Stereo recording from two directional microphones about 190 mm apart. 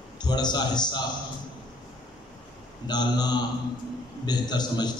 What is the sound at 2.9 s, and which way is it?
A man's voice, 20° left (ahead or behind).